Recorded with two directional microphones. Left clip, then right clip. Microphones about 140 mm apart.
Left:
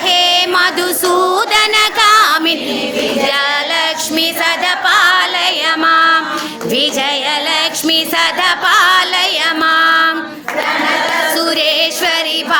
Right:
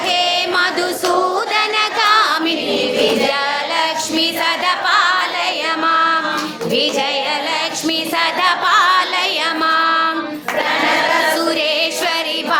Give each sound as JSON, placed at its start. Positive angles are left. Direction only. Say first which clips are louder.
{"t": 0.1, "sound": "music", "louder": "left 6 dB", "side_deg": 20}
{"t": 7.5, "sound": "music", "louder": "left 5 dB", "side_deg": 15}
{"t": 11.3, "sound": "music", "louder": "left 3 dB", "side_deg": 10}